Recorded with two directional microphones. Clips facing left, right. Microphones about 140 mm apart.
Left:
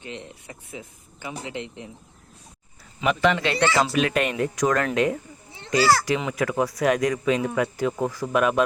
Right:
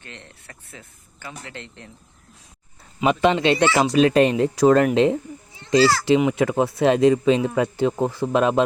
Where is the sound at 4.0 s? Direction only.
30° right (ahead or behind).